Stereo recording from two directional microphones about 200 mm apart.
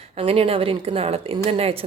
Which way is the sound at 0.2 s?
30° right (ahead or behind).